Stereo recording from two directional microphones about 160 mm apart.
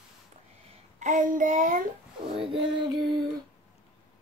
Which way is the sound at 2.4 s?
30° right (ahead or behind).